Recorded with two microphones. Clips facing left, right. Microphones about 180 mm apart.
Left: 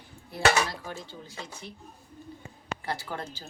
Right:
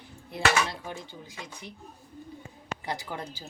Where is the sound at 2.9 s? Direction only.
15° right (ahead or behind).